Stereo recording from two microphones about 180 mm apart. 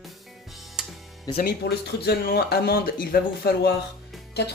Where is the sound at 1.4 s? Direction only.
60° left (ahead or behind).